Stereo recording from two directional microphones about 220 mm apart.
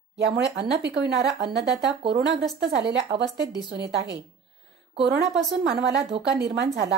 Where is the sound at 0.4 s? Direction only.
50° right (ahead or behind).